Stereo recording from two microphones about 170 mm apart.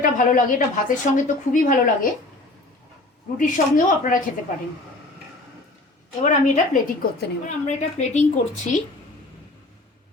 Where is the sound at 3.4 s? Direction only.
50° left (ahead or behind).